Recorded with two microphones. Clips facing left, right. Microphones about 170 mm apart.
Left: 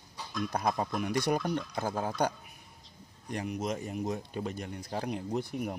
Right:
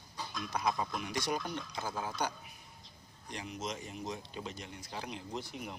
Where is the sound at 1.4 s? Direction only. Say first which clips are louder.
Left 8 dB; 40° left (ahead or behind).